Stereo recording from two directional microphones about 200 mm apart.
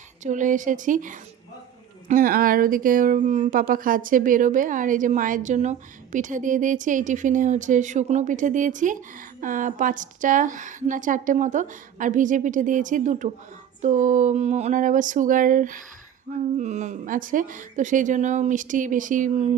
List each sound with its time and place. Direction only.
0.2 s speech: 40° right (ahead or behind)